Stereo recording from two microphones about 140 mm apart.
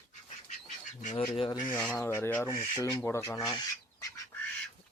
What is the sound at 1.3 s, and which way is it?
Speech, 35° left (ahead or behind).